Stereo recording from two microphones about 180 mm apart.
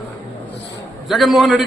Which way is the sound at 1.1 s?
Centre (ahead or behind).